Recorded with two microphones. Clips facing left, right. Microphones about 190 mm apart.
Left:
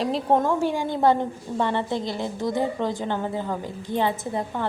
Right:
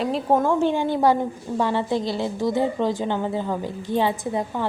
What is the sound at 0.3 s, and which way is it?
Speech, 5° right (ahead or behind).